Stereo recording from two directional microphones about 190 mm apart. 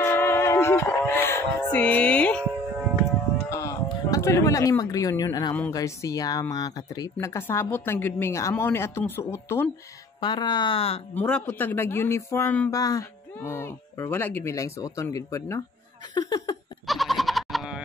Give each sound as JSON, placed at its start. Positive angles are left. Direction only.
{"t": 0.0, "sound": "music", "side_deg": 15}
{"t": 3.4, "sound": "a sound", "side_deg": 15}
{"t": 5.5, "sound": "speech", "side_deg": 10}
{"t": 5.8, "sound": "speech", "side_deg": 20}
{"t": 11.1, "sound": "speech", "side_deg": 10}
{"t": 16.8, "sound": "bleat", "side_deg": 0}